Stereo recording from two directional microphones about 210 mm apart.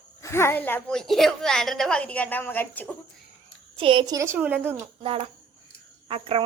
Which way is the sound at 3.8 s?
25° right (ahead or behind).